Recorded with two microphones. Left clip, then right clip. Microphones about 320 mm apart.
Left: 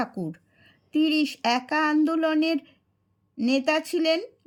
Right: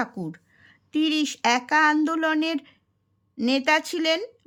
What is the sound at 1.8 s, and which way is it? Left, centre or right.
Speech, centre.